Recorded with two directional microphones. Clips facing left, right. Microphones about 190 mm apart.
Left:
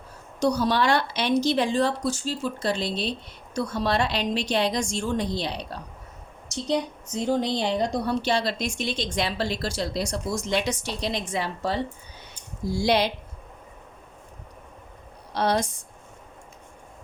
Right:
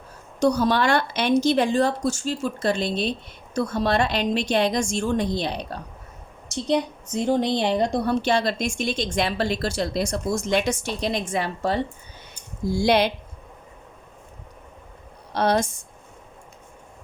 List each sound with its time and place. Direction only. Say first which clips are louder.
0.3 s speech: right 3 dB; 50° right (ahead or behind)
15.3 s a woman's voice: right 3 dB; 50° right (ahead or behind)